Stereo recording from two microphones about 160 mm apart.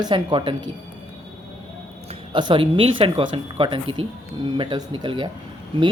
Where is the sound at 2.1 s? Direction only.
30° right (ahead or behind).